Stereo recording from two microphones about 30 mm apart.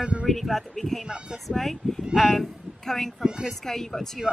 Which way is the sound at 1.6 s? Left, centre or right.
Centre.